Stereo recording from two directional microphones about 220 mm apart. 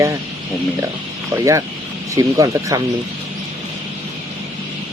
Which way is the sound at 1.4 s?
15° right (ahead or behind).